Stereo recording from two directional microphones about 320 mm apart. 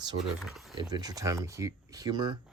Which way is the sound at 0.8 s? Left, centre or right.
Centre.